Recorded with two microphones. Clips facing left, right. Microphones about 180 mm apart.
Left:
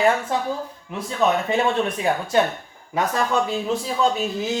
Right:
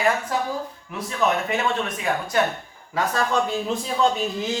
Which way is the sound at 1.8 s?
30° left (ahead or behind).